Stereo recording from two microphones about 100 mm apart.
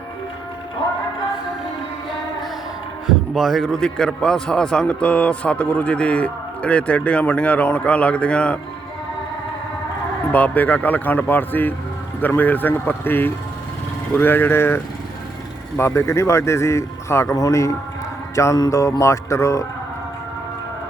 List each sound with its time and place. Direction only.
3.1 s a man's voice: centre (ahead or behind)
10.3 s a man's voice: 15° left (ahead or behind)
15.8 s speech: 25° left (ahead or behind)
18.5 s music: 35° left (ahead or behind)